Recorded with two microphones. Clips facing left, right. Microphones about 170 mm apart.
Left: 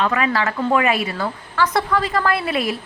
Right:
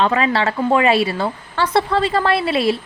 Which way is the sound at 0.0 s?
30° right (ahead or behind).